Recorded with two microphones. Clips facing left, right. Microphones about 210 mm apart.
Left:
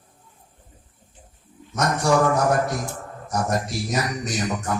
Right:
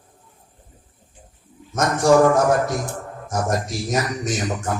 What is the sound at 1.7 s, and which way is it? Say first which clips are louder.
Speech: right 5 dB; 45° right (ahead or behind).